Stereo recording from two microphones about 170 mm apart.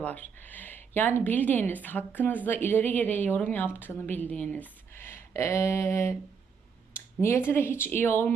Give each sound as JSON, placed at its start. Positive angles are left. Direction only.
{"t": 0.0, "sound": "a woman's voice", "side_deg": 10}